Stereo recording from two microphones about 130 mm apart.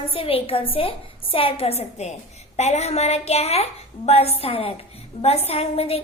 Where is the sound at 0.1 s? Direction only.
45° left (ahead or behind).